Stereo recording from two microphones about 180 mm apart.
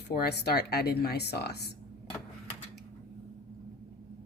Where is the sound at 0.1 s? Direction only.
60° left (ahead or behind).